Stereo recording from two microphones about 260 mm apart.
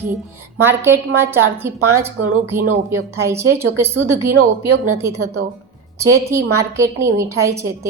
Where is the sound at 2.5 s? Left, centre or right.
Centre.